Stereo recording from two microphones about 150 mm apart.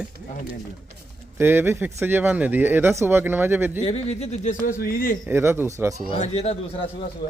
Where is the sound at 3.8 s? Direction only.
45° left (ahead or behind); by 5.1 s 80° left.